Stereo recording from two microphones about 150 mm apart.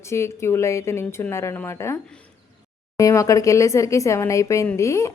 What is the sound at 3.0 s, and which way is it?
A woman's voice, 20° left (ahead or behind).